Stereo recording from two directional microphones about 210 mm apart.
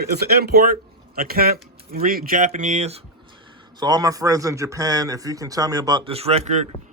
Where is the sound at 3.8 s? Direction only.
20° right (ahead or behind).